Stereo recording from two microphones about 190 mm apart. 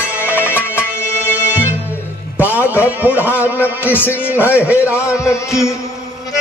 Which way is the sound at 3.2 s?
10° left (ahead or behind).